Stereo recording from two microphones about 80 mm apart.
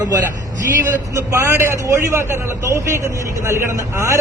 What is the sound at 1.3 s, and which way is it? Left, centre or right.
A man's voice, right.